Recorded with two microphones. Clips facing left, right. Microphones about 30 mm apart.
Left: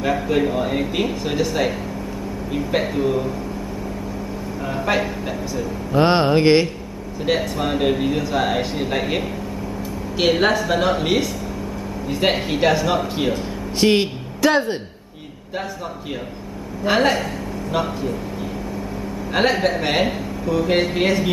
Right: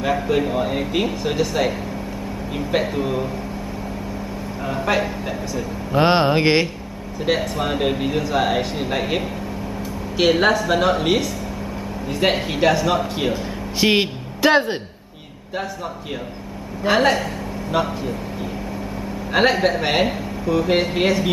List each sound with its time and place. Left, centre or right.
0.0 s speech: centre
2.8 s speech: centre
4.6 s speech: centre
14.4 s speech: centre
16.8 s a man's voice: centre
19.3 s speech: centre